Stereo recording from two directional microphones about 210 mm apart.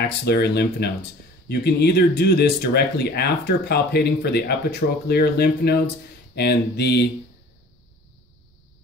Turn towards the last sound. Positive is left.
turn(degrees=50)  # may be behind; listen again after turning